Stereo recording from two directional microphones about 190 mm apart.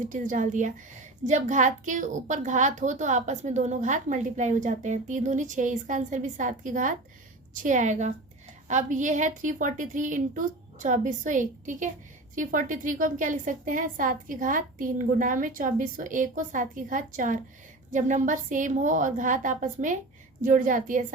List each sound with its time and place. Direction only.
0.1 s a woman's voice: 45° right (ahead or behind)